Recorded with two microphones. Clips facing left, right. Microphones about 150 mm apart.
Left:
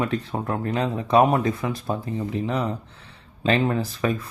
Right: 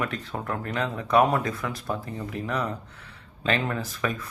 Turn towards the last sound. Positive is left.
turn(degrees=30)  # may be behind; listen again after turning